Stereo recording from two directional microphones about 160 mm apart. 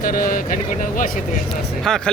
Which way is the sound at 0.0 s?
60° left (ahead or behind).